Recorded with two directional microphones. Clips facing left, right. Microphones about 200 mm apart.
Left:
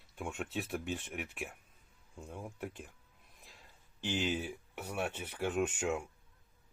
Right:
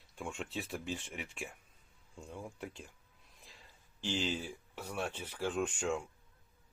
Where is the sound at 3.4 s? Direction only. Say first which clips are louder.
Even; centre (ahead or behind).